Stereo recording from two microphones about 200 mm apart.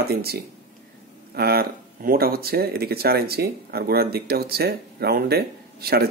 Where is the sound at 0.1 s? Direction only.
50° right (ahead or behind).